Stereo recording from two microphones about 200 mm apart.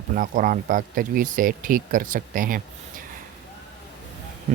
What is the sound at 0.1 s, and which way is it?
Speech, 40° right (ahead or behind).